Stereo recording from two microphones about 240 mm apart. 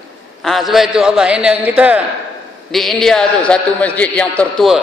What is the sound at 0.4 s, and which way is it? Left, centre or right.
A man's voice, centre.